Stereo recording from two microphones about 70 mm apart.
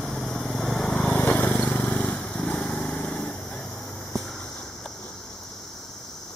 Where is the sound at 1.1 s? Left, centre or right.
Centre.